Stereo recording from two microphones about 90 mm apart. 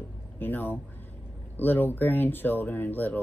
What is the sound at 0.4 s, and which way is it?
Speech, 20° left (ahead or behind).